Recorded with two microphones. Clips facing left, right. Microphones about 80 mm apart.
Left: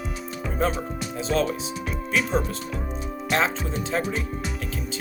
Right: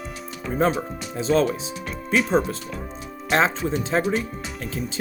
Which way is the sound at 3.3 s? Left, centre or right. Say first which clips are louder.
Right 4 dB; right.